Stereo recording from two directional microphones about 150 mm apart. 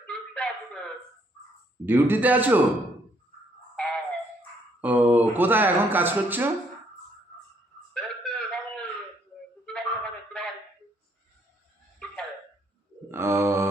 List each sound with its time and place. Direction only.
0.1 s a sound: 5° left (ahead or behind)
1.8 s speech: 15° right (ahead or behind)
3.8 s music: 5° left (ahead or behind)
4.8 s speech: 10° right (ahead or behind)
7.9 s a sound: 5° left (ahead or behind)
13.1 s mantra: 15° right (ahead or behind)